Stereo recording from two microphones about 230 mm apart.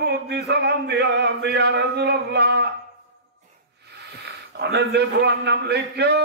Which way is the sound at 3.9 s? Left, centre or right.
Right.